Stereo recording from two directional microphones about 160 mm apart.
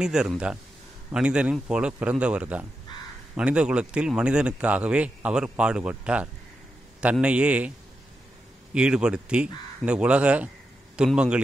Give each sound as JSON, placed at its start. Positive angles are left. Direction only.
{"t": 0.0, "sound": "a man's voice", "side_deg": -5}
{"t": 8.7, "sound": "a man's voice", "side_deg": -5}